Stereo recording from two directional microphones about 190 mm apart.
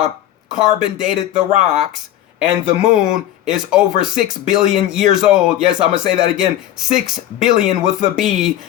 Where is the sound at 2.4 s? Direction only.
5° right (ahead or behind).